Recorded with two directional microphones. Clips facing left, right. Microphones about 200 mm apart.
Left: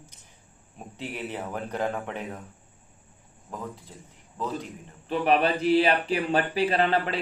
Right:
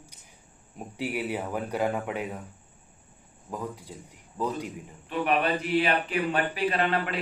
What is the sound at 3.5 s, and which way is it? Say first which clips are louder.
Speech: right 2 dB; 10° right (ahead or behind).